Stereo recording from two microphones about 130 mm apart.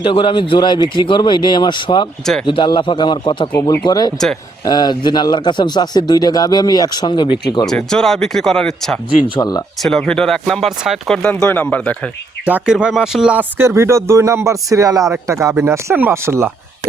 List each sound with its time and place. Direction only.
0.0 s speech: 40° left (ahead or behind)
3.5 s speech: 20° left (ahead or behind)
7.9 s speech: 5° left (ahead or behind)
9.4 s speech: 30° left (ahead or behind)
9.8 s speech: centre (ahead or behind)
11.2 s speech: 10° left (ahead or behind)
12.5 s speech: 10° right (ahead or behind)
13.6 s speech: 20° right (ahead or behind)